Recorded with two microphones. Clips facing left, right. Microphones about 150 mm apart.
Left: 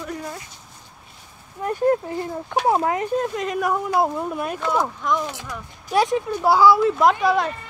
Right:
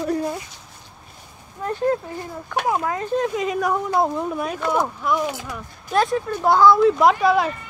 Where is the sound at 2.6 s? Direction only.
30° left (ahead or behind).